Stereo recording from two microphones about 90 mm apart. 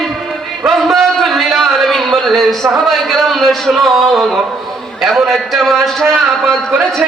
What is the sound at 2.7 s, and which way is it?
A man's voice, centre (ahead or behind).